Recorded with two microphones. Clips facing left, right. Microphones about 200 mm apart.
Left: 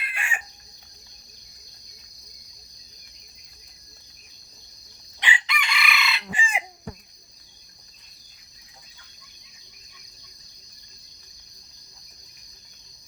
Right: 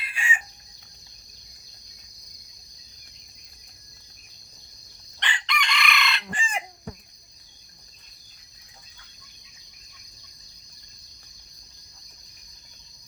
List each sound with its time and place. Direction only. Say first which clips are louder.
0.0 s chicken: right 3 dB; 60° left (ahead or behind)
5.2 s chicken: left 1 dB; 5° left (ahead or behind)